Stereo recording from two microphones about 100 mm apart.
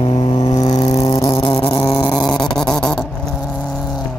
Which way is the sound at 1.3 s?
70° left (ahead or behind).